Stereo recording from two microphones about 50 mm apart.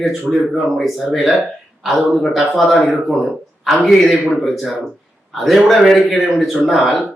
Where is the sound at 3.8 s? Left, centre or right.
Centre.